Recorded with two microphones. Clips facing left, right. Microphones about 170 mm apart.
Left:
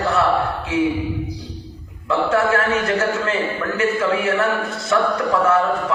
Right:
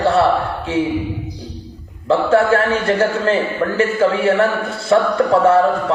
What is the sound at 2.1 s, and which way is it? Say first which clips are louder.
A man's voice: right 5 dB; 30° right (ahead or behind).